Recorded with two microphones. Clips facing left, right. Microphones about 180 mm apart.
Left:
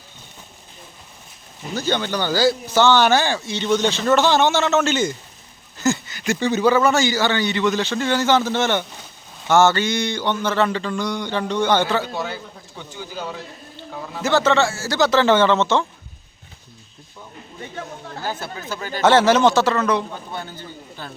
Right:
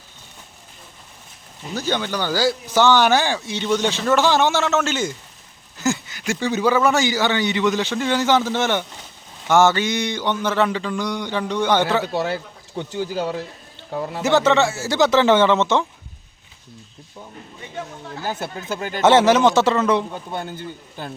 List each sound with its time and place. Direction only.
1.7 s mantra: 10° right (ahead or behind)
5.8 s a sound: 10° right (ahead or behind)
6.4 s mantra: 10° right (ahead or behind)
12.1 s speech: 75° right (ahead or behind)
14.2 s speech: 20° right (ahead or behind)
18.2 s speech: 20° right (ahead or behind)
20.3 s a man's voice: 50° right (ahead or behind)